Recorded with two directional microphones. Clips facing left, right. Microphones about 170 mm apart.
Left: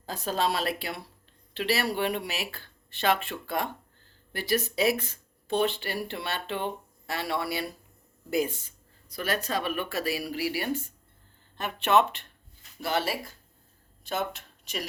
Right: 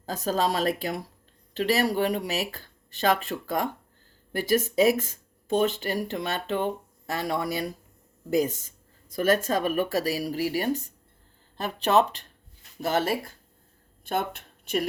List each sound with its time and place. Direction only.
0.0 s speech: 40° right (ahead or behind)
12.8 s speech: 45° right (ahead or behind)